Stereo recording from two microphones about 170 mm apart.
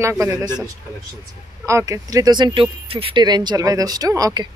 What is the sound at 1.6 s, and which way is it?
Speech, 20° right (ahead or behind).